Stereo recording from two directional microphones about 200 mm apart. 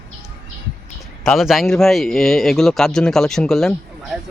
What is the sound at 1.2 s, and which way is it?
Speech, centre (ahead or behind).